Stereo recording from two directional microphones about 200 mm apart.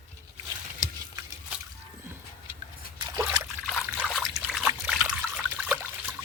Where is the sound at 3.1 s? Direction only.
15° right (ahead or behind).